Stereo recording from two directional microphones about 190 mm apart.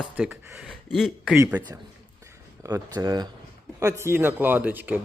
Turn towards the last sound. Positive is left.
turn(degrees=-10)  # may be behind; listen again after turning